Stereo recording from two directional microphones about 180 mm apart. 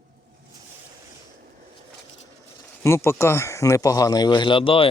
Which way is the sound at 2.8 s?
15° left (ahead or behind).